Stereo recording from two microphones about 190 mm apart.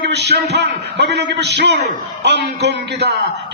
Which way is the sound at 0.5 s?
65° right (ahead or behind).